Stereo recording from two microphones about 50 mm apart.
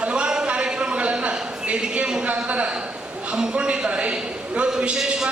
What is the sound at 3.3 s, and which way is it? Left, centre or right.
A man's voice, centre.